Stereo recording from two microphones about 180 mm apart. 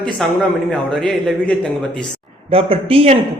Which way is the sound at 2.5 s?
30° right (ahead or behind).